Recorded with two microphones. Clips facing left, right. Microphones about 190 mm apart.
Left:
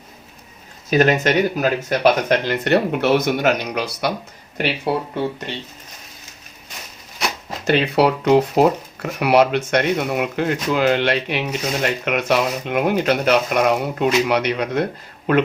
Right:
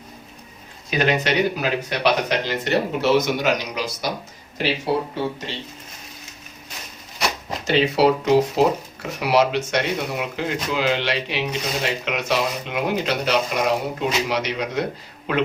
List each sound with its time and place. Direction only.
0.9 s speech: 45° left (ahead or behind)
7.7 s speech: 60° left (ahead or behind)